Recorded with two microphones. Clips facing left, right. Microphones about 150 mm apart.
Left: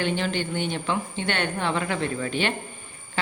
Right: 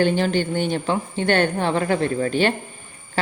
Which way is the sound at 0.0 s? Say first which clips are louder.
Right 7 dB; 40° right (ahead or behind).